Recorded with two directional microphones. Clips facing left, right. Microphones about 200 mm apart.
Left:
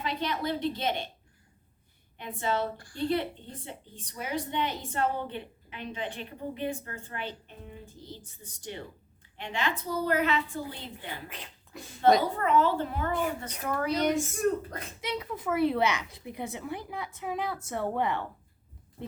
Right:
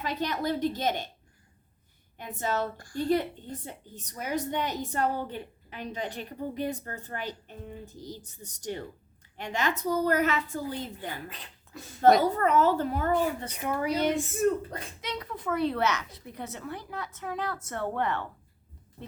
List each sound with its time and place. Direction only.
0.0 s a woman's voice: 45° right (ahead or behind)
2.1 s a woman's voice: 45° right (ahead or behind)
12.2 s a woman's voice: 40° right (ahead or behind)
13.7 s speech: 10° right (ahead or behind)
15.0 s a woman's voice: 10° left (ahead or behind)